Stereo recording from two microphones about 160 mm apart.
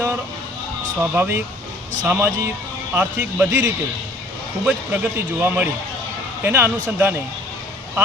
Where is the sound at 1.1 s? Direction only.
15° right (ahead or behind).